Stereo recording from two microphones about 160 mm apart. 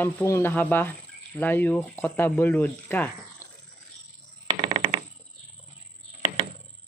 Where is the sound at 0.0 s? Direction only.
15° left (ahead or behind).